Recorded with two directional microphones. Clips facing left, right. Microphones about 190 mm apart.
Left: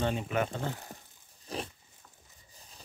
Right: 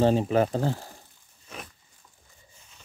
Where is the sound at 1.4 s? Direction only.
30° left (ahead or behind).